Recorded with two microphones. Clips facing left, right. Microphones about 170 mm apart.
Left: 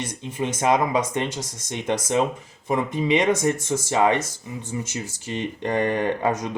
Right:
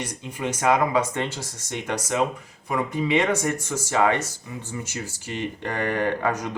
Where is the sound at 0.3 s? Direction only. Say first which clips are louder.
Left 1 dB; 20° left (ahead or behind).